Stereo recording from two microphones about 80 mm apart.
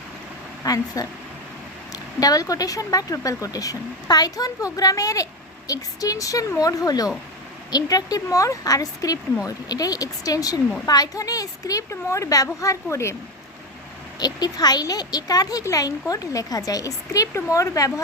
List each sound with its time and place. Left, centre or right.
0.6 s a woman's voice: left
14.2 s speech: left